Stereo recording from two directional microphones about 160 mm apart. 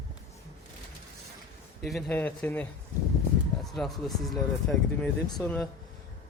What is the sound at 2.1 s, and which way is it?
A man's voice, 10° left (ahead or behind).